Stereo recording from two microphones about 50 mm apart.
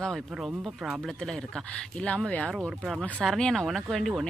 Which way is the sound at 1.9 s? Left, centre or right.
Left.